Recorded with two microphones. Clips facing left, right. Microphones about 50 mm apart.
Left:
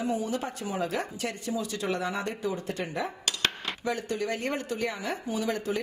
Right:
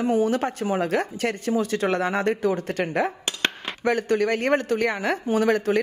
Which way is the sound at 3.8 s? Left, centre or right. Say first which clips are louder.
Right 9 dB; right.